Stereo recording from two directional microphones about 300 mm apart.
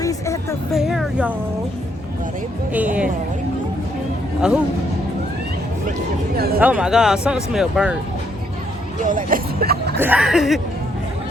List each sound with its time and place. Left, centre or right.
0.0 s music: centre
0.7 s speech: centre
2.7 s speech: centre
6.3 s speech: right
6.6 s speech: centre
9.0 s speech: right
10.0 s speech: centre